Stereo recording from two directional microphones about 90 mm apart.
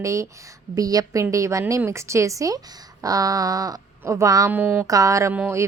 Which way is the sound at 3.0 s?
40° right (ahead or behind).